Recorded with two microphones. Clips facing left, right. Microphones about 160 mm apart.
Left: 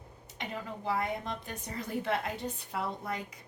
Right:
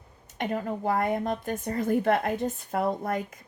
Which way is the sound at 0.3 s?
50° right (ahead or behind).